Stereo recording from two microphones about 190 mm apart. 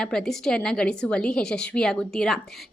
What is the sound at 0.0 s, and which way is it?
A woman's voice, 5° left (ahead or behind).